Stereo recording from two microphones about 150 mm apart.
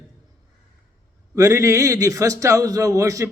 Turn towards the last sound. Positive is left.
turn(degrees=-20)  # may be behind; listen again after turning